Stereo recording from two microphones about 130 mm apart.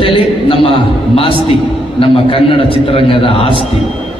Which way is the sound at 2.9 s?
45° left (ahead or behind).